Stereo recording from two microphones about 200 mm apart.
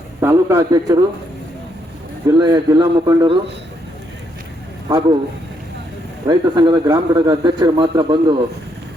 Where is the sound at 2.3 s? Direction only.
20° right (ahead or behind).